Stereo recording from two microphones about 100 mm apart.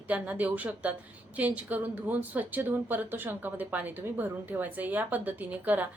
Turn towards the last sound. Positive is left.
turn(degrees=-15)  # may be behind; listen again after turning